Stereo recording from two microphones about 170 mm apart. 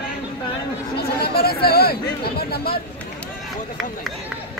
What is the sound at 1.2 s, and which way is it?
Speech, 65° left (ahead or behind).